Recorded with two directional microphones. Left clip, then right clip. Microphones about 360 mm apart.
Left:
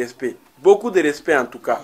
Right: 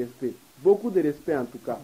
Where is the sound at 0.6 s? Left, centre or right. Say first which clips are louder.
Left 7 dB; left.